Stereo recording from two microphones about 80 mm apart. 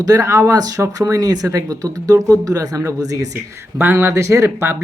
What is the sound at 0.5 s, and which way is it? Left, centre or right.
Speech, right.